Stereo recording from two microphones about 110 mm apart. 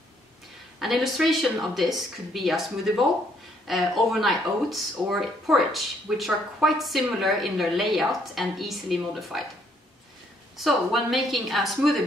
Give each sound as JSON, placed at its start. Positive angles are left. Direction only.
{"t": 0.7, "sound": "speech", "side_deg": 0}
{"t": 10.6, "sound": "speech", "side_deg": 0}